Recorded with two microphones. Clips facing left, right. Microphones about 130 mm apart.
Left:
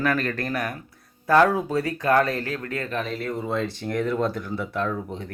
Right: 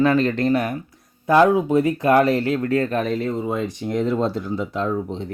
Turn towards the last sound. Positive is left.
turn(degrees=-25)  # may be behind; listen again after turning